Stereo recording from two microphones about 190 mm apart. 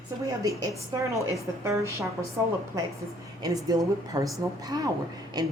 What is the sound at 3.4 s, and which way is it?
A woman's voice, 20° right (ahead or behind).